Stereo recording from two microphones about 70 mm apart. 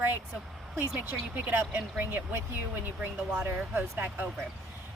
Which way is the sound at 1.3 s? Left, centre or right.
Right.